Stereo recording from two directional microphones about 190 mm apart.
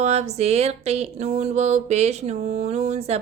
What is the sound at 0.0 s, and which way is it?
Music, 35° right (ahead or behind).